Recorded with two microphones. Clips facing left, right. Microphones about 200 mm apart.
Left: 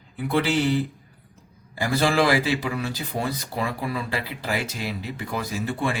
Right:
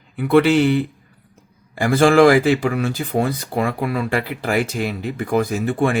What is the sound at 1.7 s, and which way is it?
Speech, 50° right (ahead or behind).